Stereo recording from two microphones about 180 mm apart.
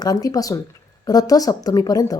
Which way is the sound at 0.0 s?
20° left (ahead or behind).